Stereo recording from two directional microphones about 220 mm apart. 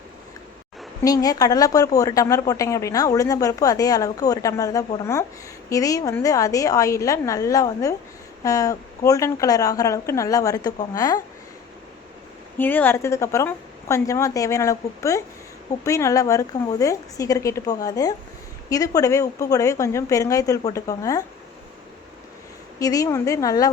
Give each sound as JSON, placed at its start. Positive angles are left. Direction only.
{"t": 1.0, "sound": "speech", "side_deg": 15}
{"t": 12.5, "sound": "speech", "side_deg": 10}
{"t": 22.8, "sound": "speech", "side_deg": 15}